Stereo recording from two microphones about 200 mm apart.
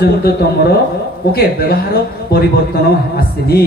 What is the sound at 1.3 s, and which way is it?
A man's voice, 50° left (ahead or behind).